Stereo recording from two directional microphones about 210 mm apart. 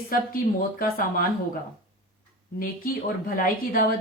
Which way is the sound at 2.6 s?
45° left (ahead or behind).